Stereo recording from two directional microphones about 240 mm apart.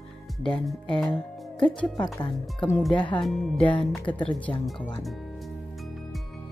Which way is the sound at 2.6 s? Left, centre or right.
Centre.